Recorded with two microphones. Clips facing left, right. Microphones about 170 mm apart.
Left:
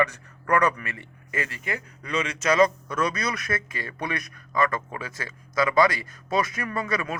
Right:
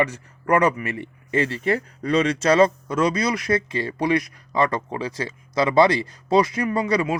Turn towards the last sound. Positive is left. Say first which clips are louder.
# right 7 dB
turn(degrees=-25)  # may be behind; listen again after turning